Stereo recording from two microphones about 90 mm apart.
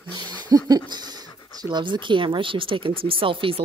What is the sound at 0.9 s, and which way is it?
Speech, 50° right (ahead or behind).